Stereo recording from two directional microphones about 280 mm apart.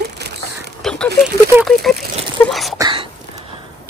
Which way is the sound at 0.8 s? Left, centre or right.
Centre.